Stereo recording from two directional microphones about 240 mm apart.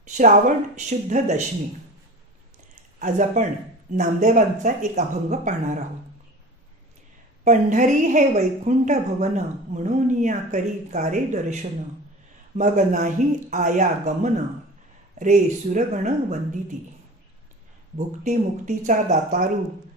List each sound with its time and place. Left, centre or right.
0.0 s speech: right
3.0 s a woman's voice: right
7.4 s a woman's voice: right
17.9 s speech: right